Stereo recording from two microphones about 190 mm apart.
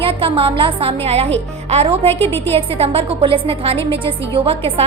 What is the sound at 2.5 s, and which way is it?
A woman's voice, 30° right (ahead or behind).